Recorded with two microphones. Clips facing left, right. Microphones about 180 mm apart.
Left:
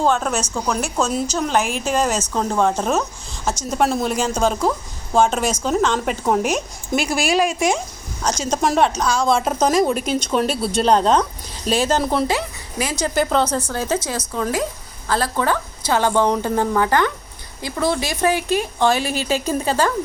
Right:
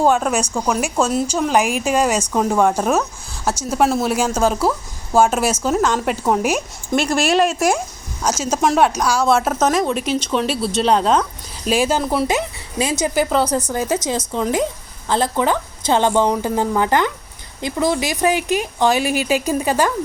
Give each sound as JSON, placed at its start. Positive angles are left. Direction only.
{"t": 0.0, "sound": "a woman's voice", "side_deg": -10}
{"t": 12.3, "sound": "speech", "side_deg": -20}
{"t": 13.1, "sound": "a woman's voice", "side_deg": -10}